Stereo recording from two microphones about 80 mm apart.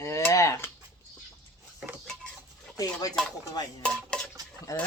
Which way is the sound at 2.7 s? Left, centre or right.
Left.